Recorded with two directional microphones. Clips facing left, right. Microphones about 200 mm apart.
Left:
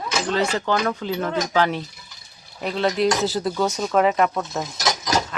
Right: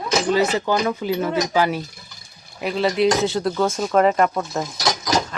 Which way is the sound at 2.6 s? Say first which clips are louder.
Right 2 dB; 5° right (ahead or behind).